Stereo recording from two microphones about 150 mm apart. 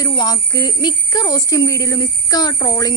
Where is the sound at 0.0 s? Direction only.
25° left (ahead or behind).